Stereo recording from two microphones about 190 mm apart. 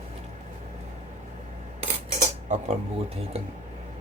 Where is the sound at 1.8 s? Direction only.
35° right (ahead or behind).